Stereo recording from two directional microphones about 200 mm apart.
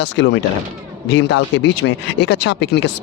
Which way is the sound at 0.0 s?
65° left (ahead or behind).